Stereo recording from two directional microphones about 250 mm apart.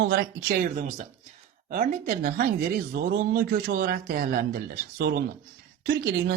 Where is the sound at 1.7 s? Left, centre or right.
Right.